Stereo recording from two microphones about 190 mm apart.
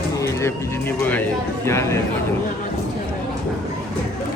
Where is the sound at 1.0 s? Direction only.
10° left (ahead or behind).